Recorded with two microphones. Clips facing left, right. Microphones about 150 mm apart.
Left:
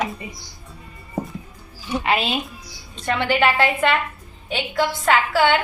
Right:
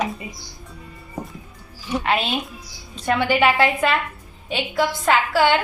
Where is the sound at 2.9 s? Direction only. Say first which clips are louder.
Right 2 dB; 10° right (ahead or behind).